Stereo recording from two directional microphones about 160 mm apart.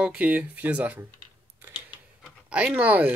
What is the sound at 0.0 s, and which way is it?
Speech, 10° right (ahead or behind).